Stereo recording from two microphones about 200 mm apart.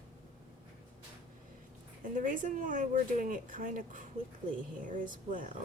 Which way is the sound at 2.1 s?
40° right (ahead or behind).